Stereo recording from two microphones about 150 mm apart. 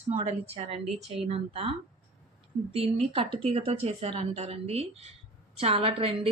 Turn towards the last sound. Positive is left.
turn(degrees=-40)  # may be behind; listen again after turning